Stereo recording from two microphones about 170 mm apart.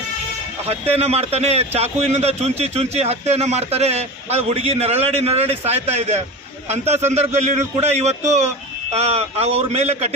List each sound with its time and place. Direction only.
0.7 s speech: 35° right (ahead or behind)